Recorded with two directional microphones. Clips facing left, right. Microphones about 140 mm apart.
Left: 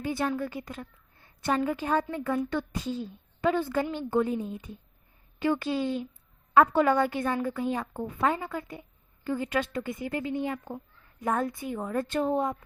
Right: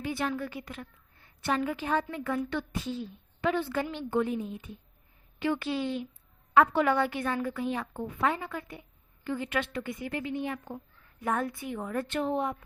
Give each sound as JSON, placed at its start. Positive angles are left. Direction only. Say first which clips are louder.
{"t": 0.0, "sound": "a woman's voice", "louder": "left 3 dB", "side_deg": 40}
{"t": 0.5, "sound": "a sound", "louder": "left 3 dB", "side_deg": 30}
{"t": 1.5, "sound": "a woman's voice", "louder": "left 2 dB", "side_deg": 40}
{"t": 7.3, "sound": "speech", "louder": "left 2 dB", "side_deg": 25}
{"t": 7.6, "sound": "a woman's voice", "louder": "left 2 dB", "side_deg": 40}
{"t": 9.2, "sound": "a woman's voice", "louder": "left 3 dB", "side_deg": 40}
{"t": 9.7, "sound": "a woman's voice", "louder": "left 2 dB", "side_deg": 25}
{"t": 10.3, "sound": "a woman's voice", "louder": "left 3 dB", "side_deg": 20}